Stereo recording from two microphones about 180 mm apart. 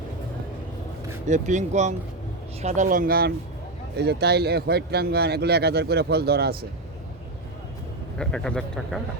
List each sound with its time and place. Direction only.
1.3 s speech: 40° right (ahead or behind); by 6.7 s 60° right (ahead or behind)
8.2 s speech: 5° left (ahead or behind)